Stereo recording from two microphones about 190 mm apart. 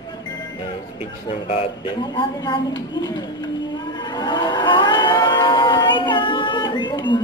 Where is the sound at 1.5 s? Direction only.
30° left (ahead or behind).